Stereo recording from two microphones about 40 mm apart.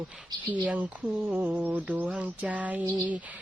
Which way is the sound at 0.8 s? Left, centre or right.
Right.